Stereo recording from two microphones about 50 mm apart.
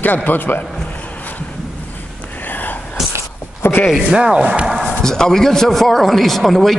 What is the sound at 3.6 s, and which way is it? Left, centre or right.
Speech, left.